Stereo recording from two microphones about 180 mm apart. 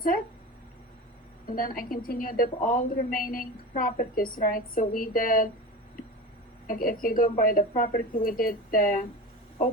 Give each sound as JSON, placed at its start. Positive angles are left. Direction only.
{"t": 1.5, "sound": "a woman's voice", "side_deg": 50}
{"t": 6.7, "sound": "a woman's voice", "side_deg": 50}